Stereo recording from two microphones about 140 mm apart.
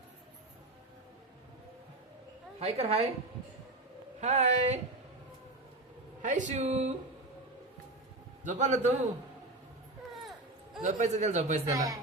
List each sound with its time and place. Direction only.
2.6 s a woman's voice: 50° right (ahead or behind)
4.2 s speech: 55° right (ahead or behind)
6.2 s speech: 60° right (ahead or behind)
8.4 s speech: 60° right (ahead or behind)
10.8 s speech: 60° right (ahead or behind)
11.7 s speech: 25° right (ahead or behind)